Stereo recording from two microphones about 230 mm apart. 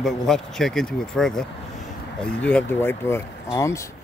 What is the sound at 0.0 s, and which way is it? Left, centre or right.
Speech, centre.